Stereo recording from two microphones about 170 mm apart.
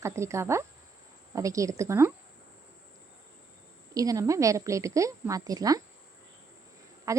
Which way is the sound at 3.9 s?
20° right (ahead or behind).